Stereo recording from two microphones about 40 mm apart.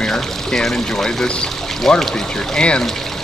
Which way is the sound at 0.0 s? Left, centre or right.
Centre.